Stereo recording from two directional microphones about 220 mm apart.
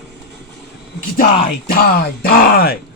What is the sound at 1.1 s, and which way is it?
Speech, 40° left (ahead or behind).